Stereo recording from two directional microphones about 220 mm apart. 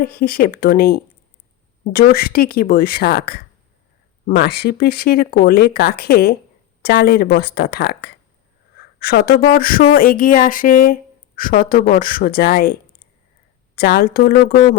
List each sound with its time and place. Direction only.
0.0 s speech: 45° left (ahead or behind)
13.7 s speech: 45° left (ahead or behind)